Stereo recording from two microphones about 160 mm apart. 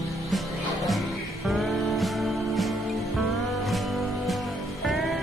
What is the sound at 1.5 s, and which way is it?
Music, centre (ahead or behind).